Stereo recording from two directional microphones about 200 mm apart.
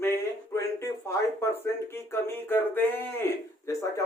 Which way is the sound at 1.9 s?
10° left (ahead or behind).